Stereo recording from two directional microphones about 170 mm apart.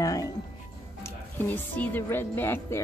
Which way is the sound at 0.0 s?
20° left (ahead or behind).